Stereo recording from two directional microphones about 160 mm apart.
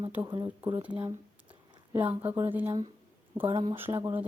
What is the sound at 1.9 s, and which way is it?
Speech, 15° right (ahead or behind).